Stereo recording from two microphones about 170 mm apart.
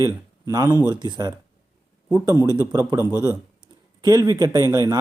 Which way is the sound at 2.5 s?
20° right (ahead or behind).